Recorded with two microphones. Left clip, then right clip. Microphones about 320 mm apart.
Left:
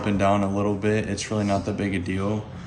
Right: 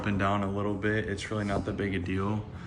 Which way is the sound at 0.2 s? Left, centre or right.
Left.